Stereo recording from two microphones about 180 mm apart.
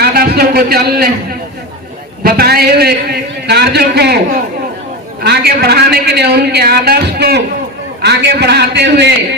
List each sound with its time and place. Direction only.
0.0 s a man's voice: 60° right (ahead or behind)
5.2 s a man's voice: 65° right (ahead or behind)